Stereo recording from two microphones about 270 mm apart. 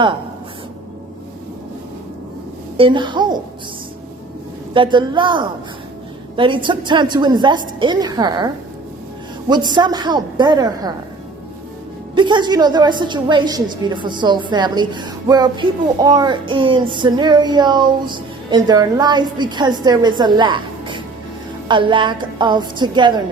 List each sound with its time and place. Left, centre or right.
2.7 s speech: centre
4.7 s speech: centre
12.1 s speech: centre